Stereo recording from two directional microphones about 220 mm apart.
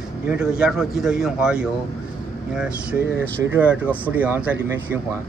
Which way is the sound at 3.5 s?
5° right (ahead or behind).